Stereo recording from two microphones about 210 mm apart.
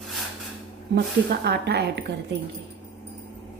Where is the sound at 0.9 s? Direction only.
50° right (ahead or behind).